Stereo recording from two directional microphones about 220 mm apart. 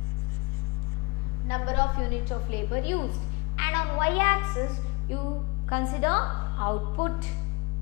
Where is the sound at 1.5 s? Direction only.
10° left (ahead or behind).